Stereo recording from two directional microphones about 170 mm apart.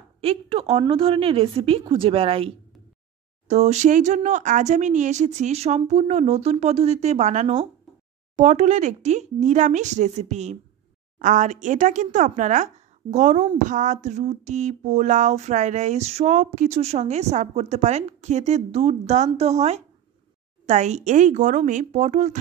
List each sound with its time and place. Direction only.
0.2 s a woman's voice: 35° right (ahead or behind)